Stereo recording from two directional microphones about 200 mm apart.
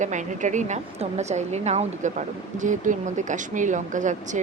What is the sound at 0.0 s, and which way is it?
A woman's voice, 40° right (ahead or behind).